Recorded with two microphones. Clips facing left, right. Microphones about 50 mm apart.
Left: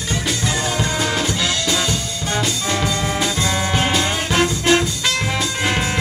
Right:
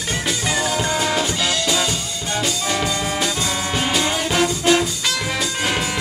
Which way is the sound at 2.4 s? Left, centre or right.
Centre.